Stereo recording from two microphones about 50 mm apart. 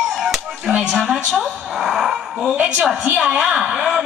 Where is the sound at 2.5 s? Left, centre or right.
Right.